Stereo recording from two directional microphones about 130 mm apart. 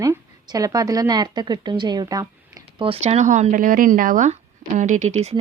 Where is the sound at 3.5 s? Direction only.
90° right; by 5.4 s 55° right (ahead or behind).